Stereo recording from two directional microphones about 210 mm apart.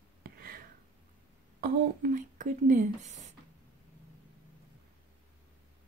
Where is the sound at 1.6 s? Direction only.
40° right (ahead or behind).